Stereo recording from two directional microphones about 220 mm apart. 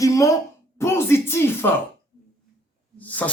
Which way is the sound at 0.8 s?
10° left (ahead or behind).